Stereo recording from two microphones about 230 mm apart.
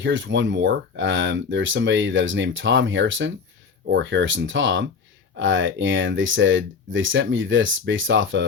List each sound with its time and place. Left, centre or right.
0.0 s speech: right